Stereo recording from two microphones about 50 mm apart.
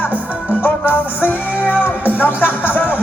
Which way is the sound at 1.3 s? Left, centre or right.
Left.